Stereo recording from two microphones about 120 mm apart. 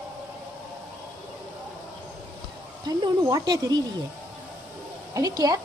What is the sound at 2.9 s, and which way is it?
Speech, 35° right (ahead or behind).